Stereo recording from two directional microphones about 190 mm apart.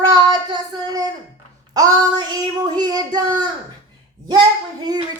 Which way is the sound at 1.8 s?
20° right (ahead or behind).